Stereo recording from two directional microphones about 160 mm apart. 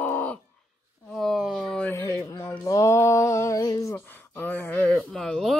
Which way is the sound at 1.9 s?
20° left (ahead or behind).